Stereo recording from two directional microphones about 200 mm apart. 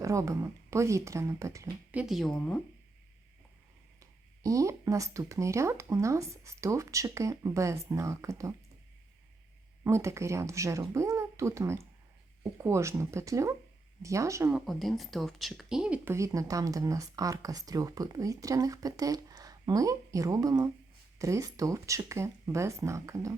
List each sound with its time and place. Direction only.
0.0 s speech: 15° right (ahead or behind)
1.9 s speech: 5° right (ahead or behind)
4.0 s speech: 15° right (ahead or behind)
9.8 s speech: 15° right (ahead or behind)
14.7 s speech: centre (ahead or behind)